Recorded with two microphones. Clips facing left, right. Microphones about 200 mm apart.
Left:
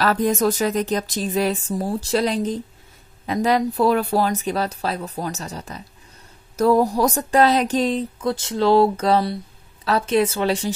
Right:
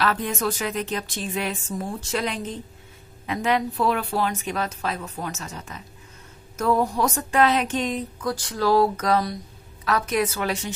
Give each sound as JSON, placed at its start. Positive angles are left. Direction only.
{"t": 0.0, "sound": "a woman's voice", "side_deg": 40}